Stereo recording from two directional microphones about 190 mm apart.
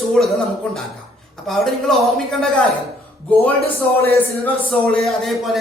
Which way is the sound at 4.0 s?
5° left (ahead or behind).